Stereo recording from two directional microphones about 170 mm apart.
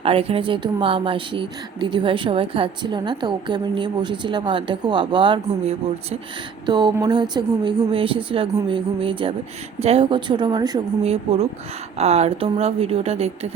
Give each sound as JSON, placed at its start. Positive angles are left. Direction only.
{"t": 0.0, "sound": "a woman's voice", "side_deg": -35}
{"t": 11.0, "sound": "a woman's voice", "side_deg": -35}